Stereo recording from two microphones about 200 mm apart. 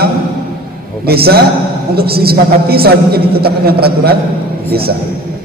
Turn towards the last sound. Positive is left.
turn(degrees=-50)  # may be behind; listen again after turning